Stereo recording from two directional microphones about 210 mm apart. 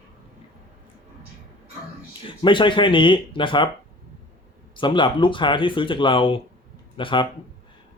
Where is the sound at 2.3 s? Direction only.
25° left (ahead or behind).